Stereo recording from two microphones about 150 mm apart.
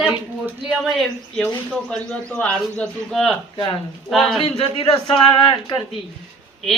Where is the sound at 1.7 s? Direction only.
5° left (ahead or behind).